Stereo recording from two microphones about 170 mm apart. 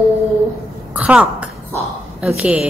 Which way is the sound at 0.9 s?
5° right (ahead or behind).